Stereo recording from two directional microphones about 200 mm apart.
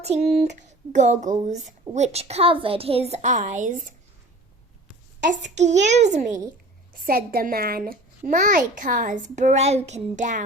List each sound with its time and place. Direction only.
0.0 s speech: 30° right (ahead or behind)
5.2 s speech: 35° right (ahead or behind)
6.9 s speech: 45° right (ahead or behind)